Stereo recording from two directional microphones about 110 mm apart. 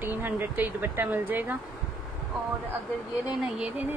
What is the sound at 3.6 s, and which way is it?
Speech, 15° right (ahead or behind).